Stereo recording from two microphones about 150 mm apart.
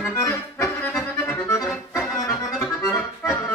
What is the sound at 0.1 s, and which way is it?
Accordion, 15° left (ahead or behind).